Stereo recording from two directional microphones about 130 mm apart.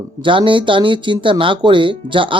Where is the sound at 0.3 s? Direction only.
40° right (ahead or behind).